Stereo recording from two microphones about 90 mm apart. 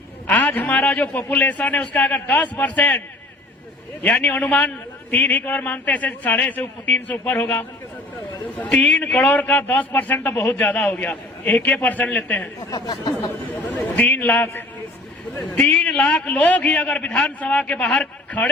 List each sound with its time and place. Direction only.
0.3 s a man's voice: 20° left (ahead or behind)
4.0 s a man's voice: 15° left (ahead or behind)
12.7 s speech: 45° left (ahead or behind)
13.5 s a man's voice: 20° left (ahead or behind)
15.6 s a man's voice: 10° left (ahead or behind)